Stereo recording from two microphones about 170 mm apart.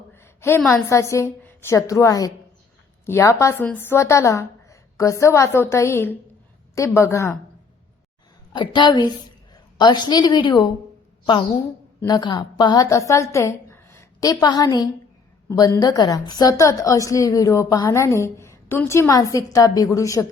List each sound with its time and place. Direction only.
0.1 s a sound: 15° left (ahead or behind)
0.6 s a woman's voice: centre (ahead or behind)
0.9 s a woman's voice: 15° left (ahead or behind)
8.5 s a woman's voice: 25° left (ahead or behind)
12.0 s a woman's voice: 25° left (ahead or behind)